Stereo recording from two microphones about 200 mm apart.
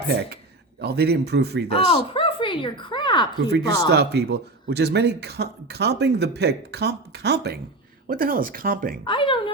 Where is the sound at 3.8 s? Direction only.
55° right (ahead or behind).